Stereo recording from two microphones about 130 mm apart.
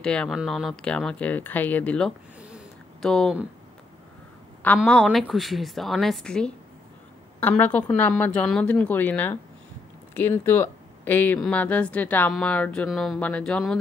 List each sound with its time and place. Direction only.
0.0 s speech: 5° left (ahead or behind)
4.8 s speech: 5° left (ahead or behind)